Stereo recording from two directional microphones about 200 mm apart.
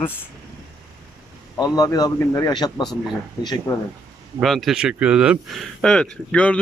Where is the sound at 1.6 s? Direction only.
20° left (ahead or behind).